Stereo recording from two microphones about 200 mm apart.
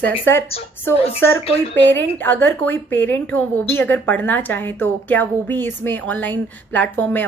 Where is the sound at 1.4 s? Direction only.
30° left (ahead or behind).